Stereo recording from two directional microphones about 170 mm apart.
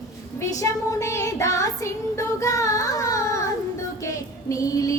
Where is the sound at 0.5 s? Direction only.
20° left (ahead or behind).